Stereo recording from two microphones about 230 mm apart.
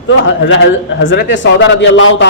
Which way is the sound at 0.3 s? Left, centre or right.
Left.